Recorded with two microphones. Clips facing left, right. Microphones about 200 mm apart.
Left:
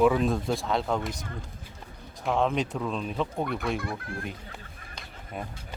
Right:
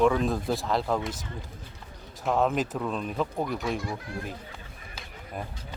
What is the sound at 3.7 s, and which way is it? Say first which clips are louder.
Speech: even; 55° left (ahead or behind).